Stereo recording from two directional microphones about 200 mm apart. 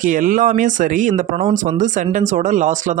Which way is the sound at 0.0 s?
40° right (ahead or behind).